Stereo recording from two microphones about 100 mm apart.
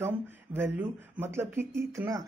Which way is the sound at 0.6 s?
20° right (ahead or behind).